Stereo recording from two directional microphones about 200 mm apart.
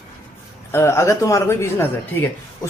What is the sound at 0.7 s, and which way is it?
A man's voice, 15° left (ahead or behind).